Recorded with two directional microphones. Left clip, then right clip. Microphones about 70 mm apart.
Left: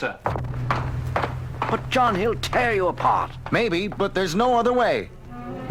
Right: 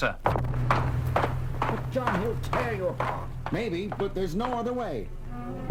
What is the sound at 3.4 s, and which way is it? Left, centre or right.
Speech, left.